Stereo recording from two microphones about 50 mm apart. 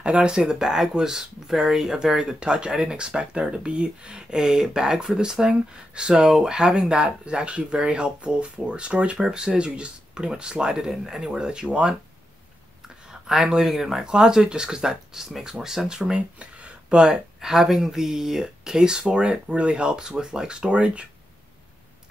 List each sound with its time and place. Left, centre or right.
0.0 s speech: centre
13.3 s speech: centre
14.0 s speech: centre
17.0 s speech: centre